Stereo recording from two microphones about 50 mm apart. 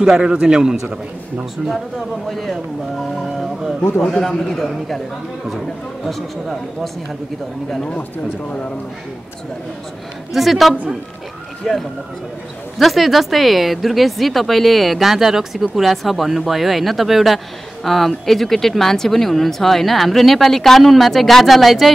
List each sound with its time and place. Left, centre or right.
0.1 s a man's voice: centre
2.2 s speech: centre
4.1 s a man's voice: centre
6.0 s speech: centre
10.3 s a man's voice: centre
12.7 s speech: centre